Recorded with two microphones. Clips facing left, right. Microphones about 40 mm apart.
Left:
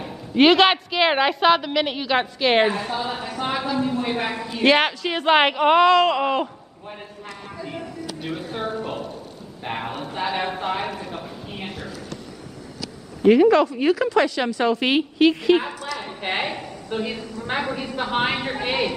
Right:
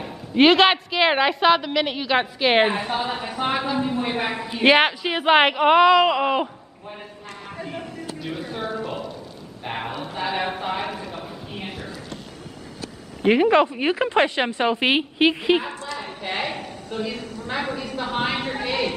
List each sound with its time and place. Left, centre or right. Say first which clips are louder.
0.0 s a woman's voice: even; centre
2.6 s a woman's voice: even; right; by 6.5 s centre
8.3 s a woman's voice: even; centre
9.7 s a woman's voice: left 1 dB; centre
11.1 s a sound: left 1 dB; centre
13.2 s a woman's voice: left 2 dB; right
16.2 s a woman's voice: left 2 dB; left
18.4 s a woman's voice: even; centre